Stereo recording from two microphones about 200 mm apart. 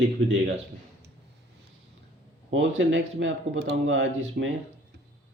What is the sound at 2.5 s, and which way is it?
Speech, 70° right (ahead or behind).